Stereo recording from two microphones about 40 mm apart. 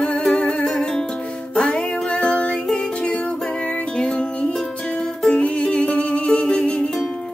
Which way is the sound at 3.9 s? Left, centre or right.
Left.